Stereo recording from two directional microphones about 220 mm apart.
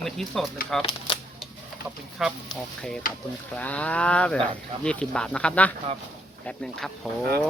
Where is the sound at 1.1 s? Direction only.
25° left (ahead or behind).